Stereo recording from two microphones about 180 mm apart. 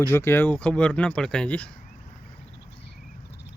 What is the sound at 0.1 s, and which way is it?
Speech, 15° left (ahead or behind).